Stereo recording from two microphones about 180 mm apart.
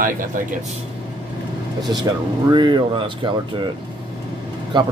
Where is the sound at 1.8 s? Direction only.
25° right (ahead or behind).